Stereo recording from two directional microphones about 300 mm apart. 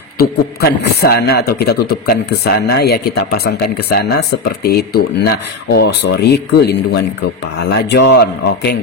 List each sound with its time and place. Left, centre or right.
0.2 s a man's voice: left